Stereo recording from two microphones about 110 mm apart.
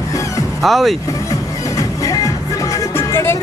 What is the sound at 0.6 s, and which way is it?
Speech, centre (ahead or behind).